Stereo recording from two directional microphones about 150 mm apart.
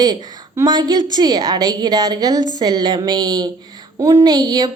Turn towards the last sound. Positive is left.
turn(degrees=-25)  # may be behind; listen again after turning